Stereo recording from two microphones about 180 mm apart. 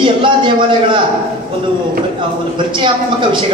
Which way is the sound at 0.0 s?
25° right (ahead or behind).